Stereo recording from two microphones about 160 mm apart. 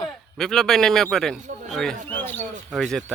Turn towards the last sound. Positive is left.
turn(degrees=5)  # may be behind; listen again after turning